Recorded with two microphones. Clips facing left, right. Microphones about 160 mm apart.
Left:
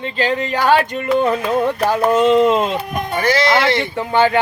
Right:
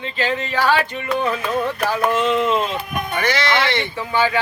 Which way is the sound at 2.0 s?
40° left (ahead or behind).